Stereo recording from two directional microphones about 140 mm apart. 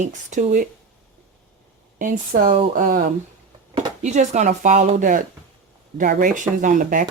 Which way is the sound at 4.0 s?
55° right (ahead or behind).